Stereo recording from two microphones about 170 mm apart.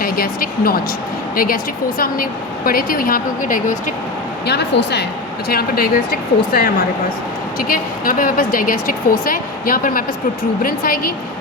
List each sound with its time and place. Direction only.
0.0 s a woman's voice: 60° left (ahead or behind)
2.6 s a woman's voice: 55° left (ahead or behind)
4.4 s speech: 85° left
5.5 s a woman's voice: 65° left (ahead or behind)